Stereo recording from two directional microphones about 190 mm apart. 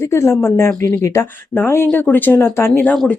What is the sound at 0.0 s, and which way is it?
Speech, 15° left (ahead or behind).